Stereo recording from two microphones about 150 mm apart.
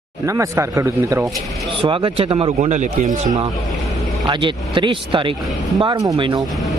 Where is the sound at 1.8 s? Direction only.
35° right (ahead or behind); by 3.3 s 55° right (ahead or behind).